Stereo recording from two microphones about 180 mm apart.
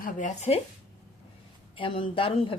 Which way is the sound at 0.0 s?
45° left (ahead or behind).